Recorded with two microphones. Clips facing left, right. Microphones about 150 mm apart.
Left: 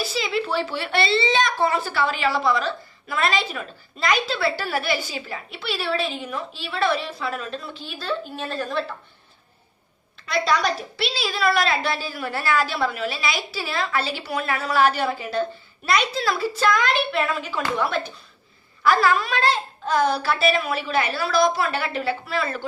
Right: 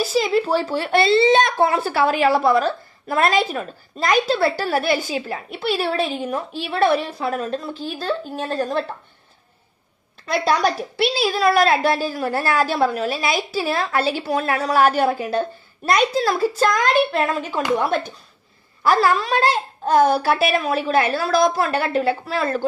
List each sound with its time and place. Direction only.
0.0 s a woman's voice: 45° right (ahead or behind)
10.2 s a woman's voice: 45° right (ahead or behind)